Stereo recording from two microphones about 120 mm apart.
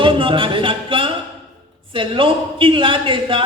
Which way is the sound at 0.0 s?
45° right (ahead or behind).